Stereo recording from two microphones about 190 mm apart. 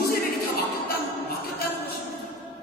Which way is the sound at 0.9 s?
55° left (ahead or behind).